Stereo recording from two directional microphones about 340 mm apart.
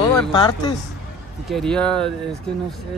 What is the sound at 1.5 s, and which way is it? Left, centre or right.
Speech, centre.